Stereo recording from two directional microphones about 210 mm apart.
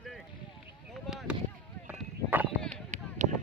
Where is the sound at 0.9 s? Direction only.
Centre (ahead or behind).